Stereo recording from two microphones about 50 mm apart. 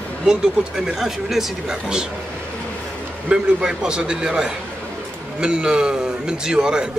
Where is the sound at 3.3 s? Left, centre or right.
Centre.